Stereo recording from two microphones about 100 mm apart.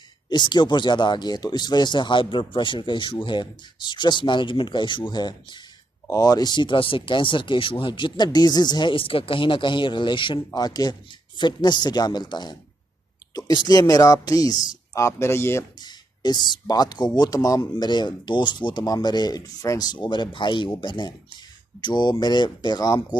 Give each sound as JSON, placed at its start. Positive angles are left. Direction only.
{"t": 0.3, "sound": "speech", "side_deg": 45}
{"t": 6.0, "sound": "speech", "side_deg": 35}
{"t": 8.9, "sound": "a man's voice", "side_deg": 65}
{"t": 10.5, "sound": "speech", "side_deg": 40}
{"t": 15.8, "sound": "speech", "side_deg": 45}